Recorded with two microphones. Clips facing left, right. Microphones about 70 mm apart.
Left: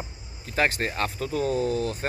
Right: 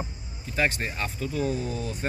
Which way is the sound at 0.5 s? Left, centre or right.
Left.